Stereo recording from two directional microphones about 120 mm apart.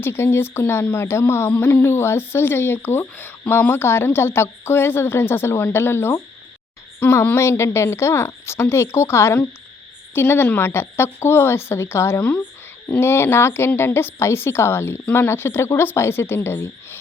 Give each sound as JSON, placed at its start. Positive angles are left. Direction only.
{"t": 0.0, "sound": "speech", "side_deg": 20}
{"t": 12.2, "sound": "speech", "side_deg": 10}